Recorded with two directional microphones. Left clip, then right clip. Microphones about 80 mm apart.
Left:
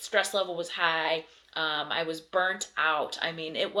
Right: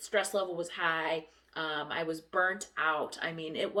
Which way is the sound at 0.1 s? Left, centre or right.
Right.